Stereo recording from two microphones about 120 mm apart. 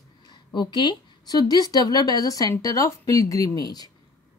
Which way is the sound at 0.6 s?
40° left (ahead or behind).